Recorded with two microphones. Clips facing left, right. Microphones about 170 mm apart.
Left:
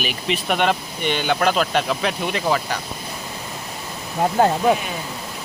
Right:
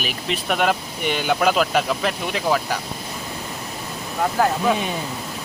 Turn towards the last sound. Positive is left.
turn(degrees=25)  # may be behind; listen again after turning